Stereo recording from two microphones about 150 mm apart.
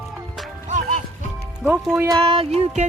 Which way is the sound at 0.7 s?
60° right (ahead or behind).